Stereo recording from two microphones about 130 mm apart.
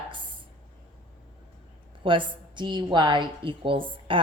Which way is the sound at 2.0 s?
40° right (ahead or behind).